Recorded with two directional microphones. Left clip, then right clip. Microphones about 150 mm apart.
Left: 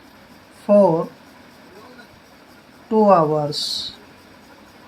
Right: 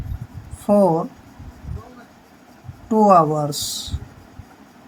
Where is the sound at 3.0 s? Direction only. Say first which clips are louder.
Right 1 dB; 30° right (ahead or behind).